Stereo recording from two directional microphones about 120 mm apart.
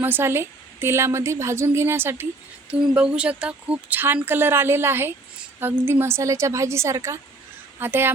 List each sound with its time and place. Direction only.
0.0 s a woman's voice: 20° right (ahead or behind)